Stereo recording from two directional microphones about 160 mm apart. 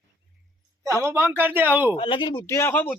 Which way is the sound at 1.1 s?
15° right (ahead or behind).